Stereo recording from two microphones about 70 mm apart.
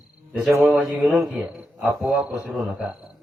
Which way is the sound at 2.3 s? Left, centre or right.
Right.